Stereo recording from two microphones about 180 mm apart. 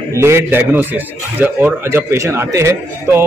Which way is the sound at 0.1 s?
15° right (ahead or behind).